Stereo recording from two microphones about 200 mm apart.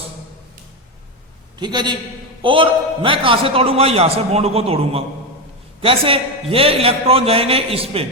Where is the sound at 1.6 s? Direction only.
20° right (ahead or behind).